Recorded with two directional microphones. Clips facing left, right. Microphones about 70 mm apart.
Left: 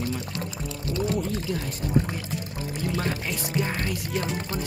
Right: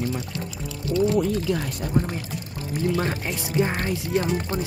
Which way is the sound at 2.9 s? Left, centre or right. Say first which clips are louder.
Right 3 dB; right.